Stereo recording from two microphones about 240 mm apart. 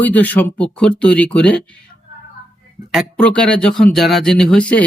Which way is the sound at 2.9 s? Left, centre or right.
Centre.